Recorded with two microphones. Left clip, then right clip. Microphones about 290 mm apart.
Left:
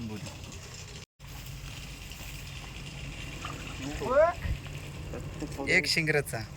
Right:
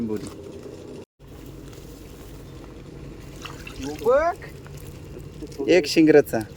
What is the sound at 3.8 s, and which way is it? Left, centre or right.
Speech, centre.